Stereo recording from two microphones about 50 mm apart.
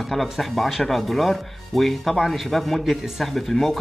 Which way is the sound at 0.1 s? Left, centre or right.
Centre.